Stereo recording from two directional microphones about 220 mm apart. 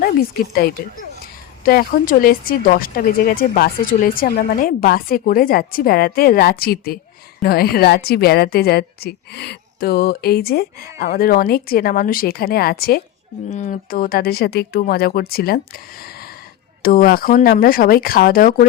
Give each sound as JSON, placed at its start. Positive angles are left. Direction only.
{"t": 1.6, "sound": "a woman's voice", "side_deg": 40}